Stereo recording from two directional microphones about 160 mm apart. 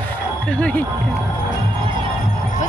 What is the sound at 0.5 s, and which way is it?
Speech, 10° left (ahead or behind).